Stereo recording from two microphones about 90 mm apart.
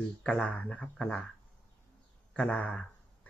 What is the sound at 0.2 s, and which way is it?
Speech, 10° left (ahead or behind).